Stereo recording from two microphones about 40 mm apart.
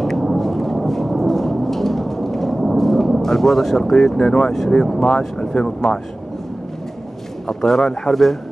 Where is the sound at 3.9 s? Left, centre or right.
Centre.